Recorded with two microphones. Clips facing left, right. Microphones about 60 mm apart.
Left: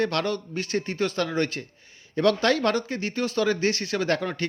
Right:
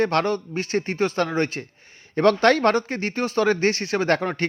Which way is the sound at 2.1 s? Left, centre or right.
Right.